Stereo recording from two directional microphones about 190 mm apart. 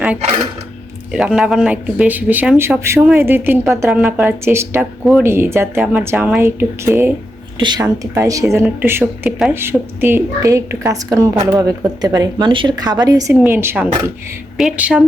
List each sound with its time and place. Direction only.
1.1 s speech: 5° right (ahead or behind)